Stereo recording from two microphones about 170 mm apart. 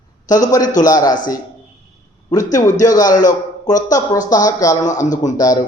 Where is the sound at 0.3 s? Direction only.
20° left (ahead or behind).